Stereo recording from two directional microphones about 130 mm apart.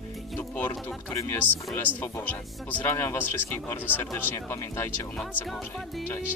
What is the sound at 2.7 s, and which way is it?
Speech, 20° left (ahead or behind).